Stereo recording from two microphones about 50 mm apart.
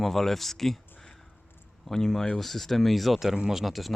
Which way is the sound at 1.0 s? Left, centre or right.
Centre.